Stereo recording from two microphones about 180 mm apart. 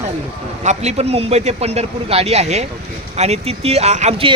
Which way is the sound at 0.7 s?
35° right (ahead or behind).